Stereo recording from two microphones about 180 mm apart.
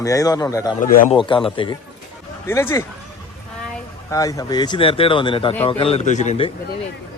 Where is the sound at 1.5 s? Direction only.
25° left (ahead or behind).